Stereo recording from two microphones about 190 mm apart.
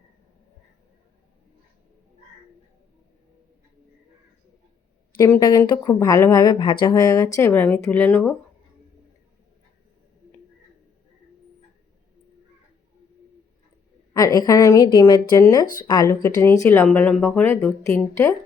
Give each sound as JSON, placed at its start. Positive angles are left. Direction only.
{"t": 5.1, "sound": "speech", "side_deg": 15}
{"t": 14.1, "sound": "speech", "side_deg": 20}